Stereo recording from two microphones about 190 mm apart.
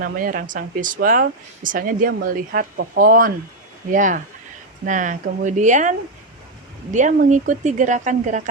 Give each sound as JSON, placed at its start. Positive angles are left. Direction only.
{"t": 0.0, "sound": "speech", "side_deg": -45}